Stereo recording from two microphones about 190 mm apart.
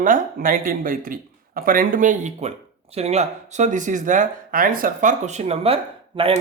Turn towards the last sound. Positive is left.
turn(degrees=-30)  # may be behind; listen again after turning